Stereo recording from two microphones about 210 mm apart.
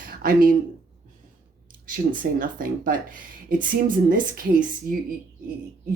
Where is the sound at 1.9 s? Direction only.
40° right (ahead or behind).